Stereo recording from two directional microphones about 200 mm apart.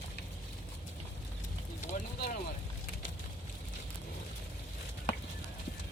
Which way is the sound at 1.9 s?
40° left (ahead or behind).